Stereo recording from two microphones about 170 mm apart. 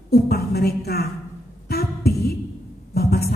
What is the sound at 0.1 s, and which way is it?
Speech, 65° left (ahead or behind).